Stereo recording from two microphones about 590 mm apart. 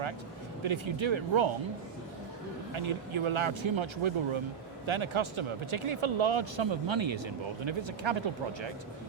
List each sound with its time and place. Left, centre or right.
0.6 s speech: right
2.7 s speech: right